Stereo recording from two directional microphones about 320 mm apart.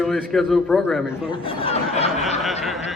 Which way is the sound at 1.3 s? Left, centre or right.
Centre.